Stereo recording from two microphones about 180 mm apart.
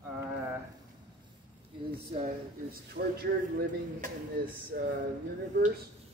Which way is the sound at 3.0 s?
60° right (ahead or behind).